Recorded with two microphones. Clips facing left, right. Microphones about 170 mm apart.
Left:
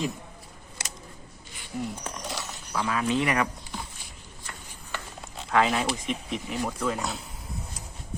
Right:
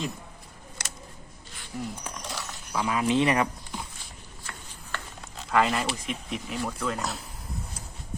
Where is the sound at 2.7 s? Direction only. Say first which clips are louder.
Right 2 dB; 15° right (ahead or behind).